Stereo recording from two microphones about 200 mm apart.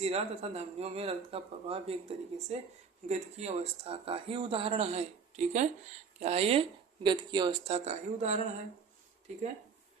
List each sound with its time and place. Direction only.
0.0 s speech: 30° right (ahead or behind)
7.9 s speech: 35° right (ahead or behind)